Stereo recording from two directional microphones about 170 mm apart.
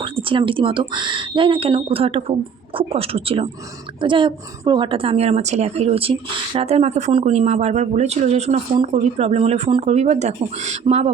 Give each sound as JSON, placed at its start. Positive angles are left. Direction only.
{"t": 0.0, "sound": "speech", "side_deg": -30}